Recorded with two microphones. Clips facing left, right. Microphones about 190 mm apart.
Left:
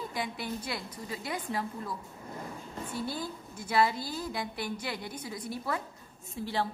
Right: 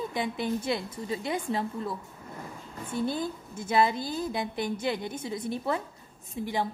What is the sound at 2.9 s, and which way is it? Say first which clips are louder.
A woman's voice: right 7 dB; 20° right (ahead or behind).